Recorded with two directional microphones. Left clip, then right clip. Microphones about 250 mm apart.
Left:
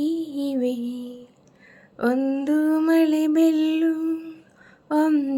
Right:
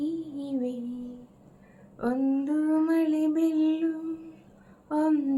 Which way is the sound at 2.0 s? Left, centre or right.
Left.